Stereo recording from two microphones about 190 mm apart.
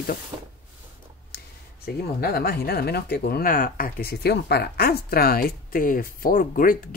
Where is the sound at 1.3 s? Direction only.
55° left (ahead or behind).